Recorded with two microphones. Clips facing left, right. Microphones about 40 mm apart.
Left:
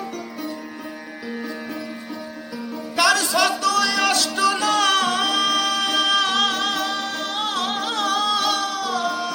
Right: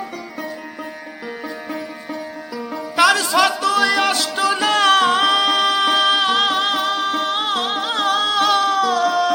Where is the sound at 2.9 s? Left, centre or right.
Right.